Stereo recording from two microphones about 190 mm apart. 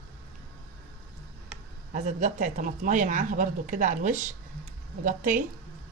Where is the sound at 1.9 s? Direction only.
40° right (ahead or behind).